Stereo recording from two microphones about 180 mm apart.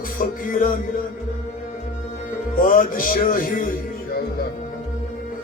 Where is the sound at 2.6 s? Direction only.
50° left (ahead or behind).